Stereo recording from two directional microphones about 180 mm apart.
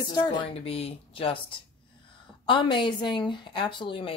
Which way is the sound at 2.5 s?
25° left (ahead or behind).